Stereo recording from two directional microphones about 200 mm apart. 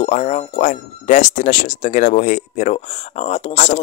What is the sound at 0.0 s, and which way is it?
Speech, 35° left (ahead or behind).